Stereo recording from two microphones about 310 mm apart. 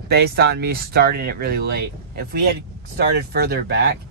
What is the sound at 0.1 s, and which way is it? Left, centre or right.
Speech, right.